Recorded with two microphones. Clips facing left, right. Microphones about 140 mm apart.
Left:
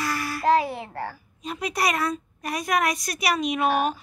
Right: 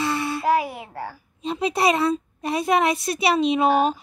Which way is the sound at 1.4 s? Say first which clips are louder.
Right 5 dB; 25° right (ahead or behind).